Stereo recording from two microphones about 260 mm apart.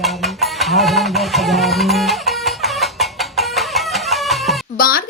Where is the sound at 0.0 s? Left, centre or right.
Centre.